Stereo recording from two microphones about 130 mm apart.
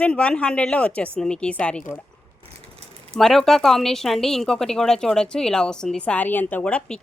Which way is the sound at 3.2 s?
Centre (ahead or behind).